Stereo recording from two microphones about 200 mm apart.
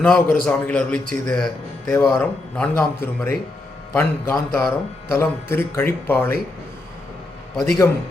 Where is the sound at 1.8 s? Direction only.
15° left (ahead or behind).